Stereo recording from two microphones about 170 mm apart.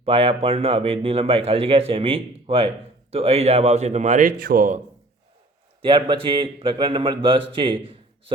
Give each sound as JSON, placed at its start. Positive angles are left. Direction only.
{"t": 0.0, "sound": "speech", "side_deg": -35}
{"t": 5.8, "sound": "a man's voice", "side_deg": -30}